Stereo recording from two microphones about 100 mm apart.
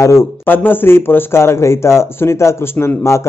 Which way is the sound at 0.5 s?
20° left (ahead or behind).